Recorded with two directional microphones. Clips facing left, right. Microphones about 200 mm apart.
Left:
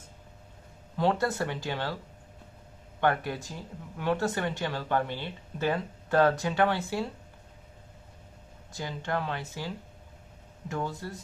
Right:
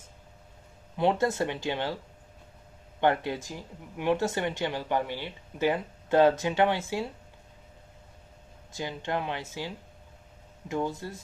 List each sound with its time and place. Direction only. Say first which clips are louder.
0.9 s speech: right 2 dB; 20° right (ahead or behind)
3.0 s speech: right 2 dB; 20° right (ahead or behind)
8.7 s speech: right 1 dB; 20° right (ahead or behind)